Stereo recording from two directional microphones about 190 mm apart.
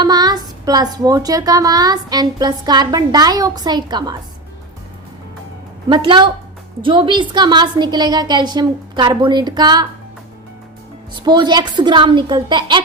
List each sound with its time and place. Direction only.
0.0 s speech: 20° right (ahead or behind)
5.9 s speech: 25° right (ahead or behind)
11.1 s speech: 25° right (ahead or behind)